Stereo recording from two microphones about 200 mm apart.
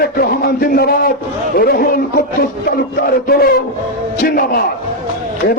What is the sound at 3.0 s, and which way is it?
A man's voice, 50° left (ahead or behind).